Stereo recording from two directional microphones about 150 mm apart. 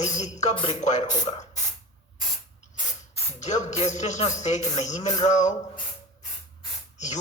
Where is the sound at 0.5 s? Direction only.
35° left (ahead or behind).